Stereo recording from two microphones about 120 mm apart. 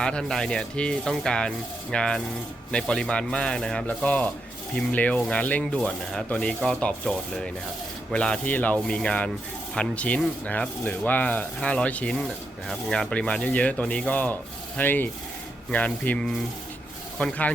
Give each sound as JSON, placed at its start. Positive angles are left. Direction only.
{"t": 0.0, "sound": "speech", "side_deg": 5}
{"t": 2.7, "sound": "rub", "side_deg": 5}